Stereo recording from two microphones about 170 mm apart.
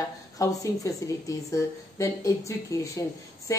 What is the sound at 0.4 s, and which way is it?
A woman's voice, 20° left (ahead or behind).